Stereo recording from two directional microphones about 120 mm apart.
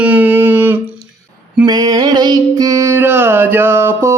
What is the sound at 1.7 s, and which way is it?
Music, 35° right (ahead or behind).